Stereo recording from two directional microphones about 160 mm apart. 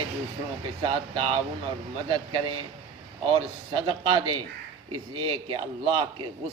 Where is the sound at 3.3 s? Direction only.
35° right (ahead or behind).